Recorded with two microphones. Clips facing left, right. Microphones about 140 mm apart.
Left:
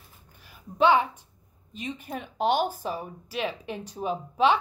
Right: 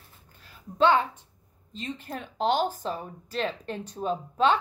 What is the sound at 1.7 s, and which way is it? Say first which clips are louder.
Speech: left 1 dB; 15° left (ahead or behind).